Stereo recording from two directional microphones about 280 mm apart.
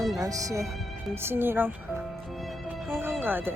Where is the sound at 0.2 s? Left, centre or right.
Centre.